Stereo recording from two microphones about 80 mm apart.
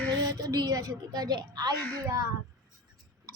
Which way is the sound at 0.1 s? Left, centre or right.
Right.